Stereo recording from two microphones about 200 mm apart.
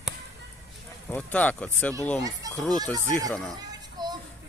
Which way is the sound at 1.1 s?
5° left (ahead or behind).